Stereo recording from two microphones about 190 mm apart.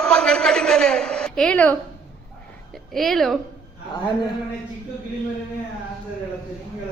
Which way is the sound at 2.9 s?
Centre (ahead or behind).